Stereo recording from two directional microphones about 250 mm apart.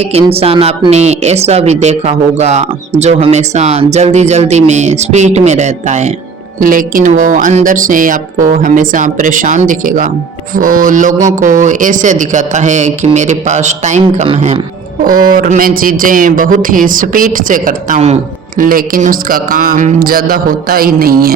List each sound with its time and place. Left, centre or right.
0.1 s speech: right
15.0 s speech: right